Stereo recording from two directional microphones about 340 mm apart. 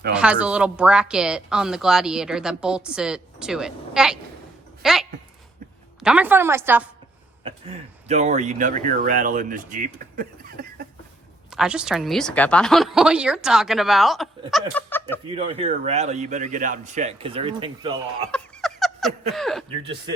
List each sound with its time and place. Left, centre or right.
0.1 s speech: centre
7.4 s speech: centre
11.5 s speech: centre
15.4 s speech: centre
18.3 s a sound: centre
19.3 s speech: centre
19.7 s speech: centre